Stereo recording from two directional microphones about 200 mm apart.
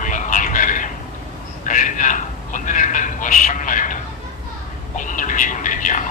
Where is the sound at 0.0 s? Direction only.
40° left (ahead or behind).